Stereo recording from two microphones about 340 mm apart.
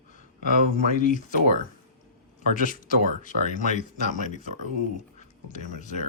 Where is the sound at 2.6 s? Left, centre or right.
Left.